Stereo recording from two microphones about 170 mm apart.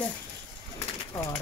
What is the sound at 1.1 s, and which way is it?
Speech, 15° left (ahead or behind).